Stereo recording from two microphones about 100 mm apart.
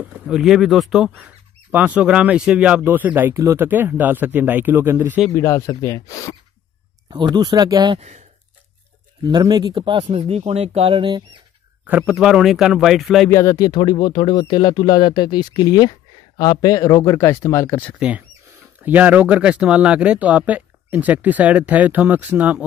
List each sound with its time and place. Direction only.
0.0 s speech: 10° right (ahead or behind)
5.3 s speech: 30° left (ahead or behind)
7.1 s speech: 50° right (ahead or behind)
9.2 s speech: 45° right (ahead or behind)
12.1 s speech: 5° right (ahead or behind)
13.3 s speech: 30° left (ahead or behind)
13.7 s speech: 50° left (ahead or behind); by 17.8 s 25° left (ahead or behind)
17.9 s speech: 10° right (ahead or behind)